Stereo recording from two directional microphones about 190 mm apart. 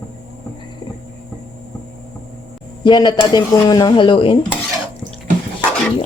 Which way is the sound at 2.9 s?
20° left (ahead or behind).